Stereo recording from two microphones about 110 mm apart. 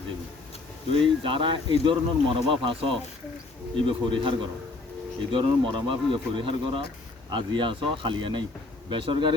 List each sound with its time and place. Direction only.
1.0 s speech: 50° right (ahead or behind)